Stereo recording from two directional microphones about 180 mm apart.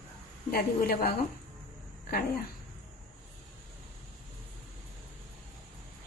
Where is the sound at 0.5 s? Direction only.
55° left (ahead or behind).